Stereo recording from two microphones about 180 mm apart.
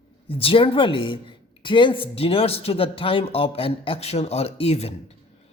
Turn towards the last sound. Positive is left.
turn(degrees=35)  # may be behind; listen again after turning